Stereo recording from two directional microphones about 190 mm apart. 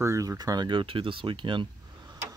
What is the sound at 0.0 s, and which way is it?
Speech, 15° right (ahead or behind).